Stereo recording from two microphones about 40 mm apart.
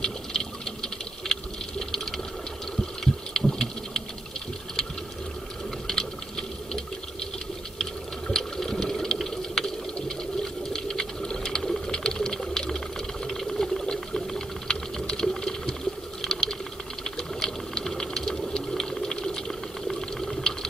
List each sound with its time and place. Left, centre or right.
0.0 s water: centre
3.0 s heart sounds: centre
5.9 s a sound: centre
7.8 s sewing machine: centre
17.0 s a sound: centre
18.7 s sewing machine: centre